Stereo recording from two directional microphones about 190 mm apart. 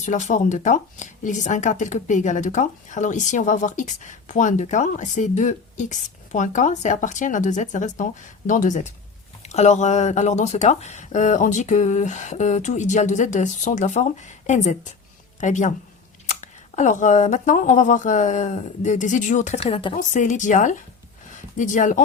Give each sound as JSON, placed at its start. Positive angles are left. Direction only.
{"t": 0.0, "sound": "speech", "side_deg": 40}